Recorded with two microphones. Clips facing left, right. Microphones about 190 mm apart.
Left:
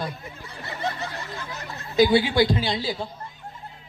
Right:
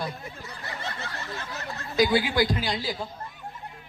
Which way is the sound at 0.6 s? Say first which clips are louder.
Left 7 dB; 15° left (ahead or behind).